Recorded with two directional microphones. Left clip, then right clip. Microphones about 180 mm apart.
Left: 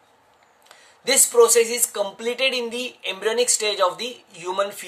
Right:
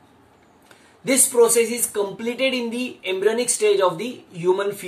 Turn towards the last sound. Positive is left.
turn(degrees=40)  # may be behind; listen again after turning